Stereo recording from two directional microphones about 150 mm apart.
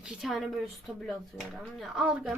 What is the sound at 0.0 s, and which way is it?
Speech, centre (ahead or behind).